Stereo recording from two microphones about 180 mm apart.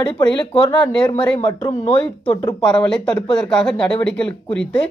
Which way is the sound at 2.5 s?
5° left (ahead or behind).